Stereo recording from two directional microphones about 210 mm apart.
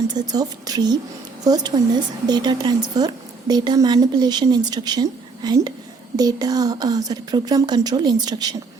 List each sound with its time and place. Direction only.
0.1 s a woman's voice: 20° right (ahead or behind)